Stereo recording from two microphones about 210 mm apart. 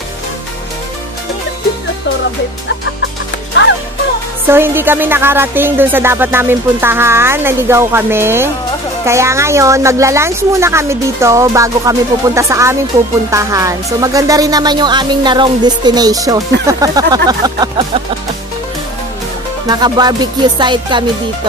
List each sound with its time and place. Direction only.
4.5 s speech: 10° right (ahead or behind)
19.7 s speech: 20° right (ahead or behind)